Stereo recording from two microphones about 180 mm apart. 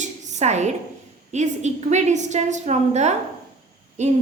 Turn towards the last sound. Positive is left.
turn(degrees=-40)  # may be behind; listen again after turning